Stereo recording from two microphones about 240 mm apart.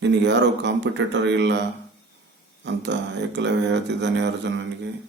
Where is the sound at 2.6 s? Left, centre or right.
Right.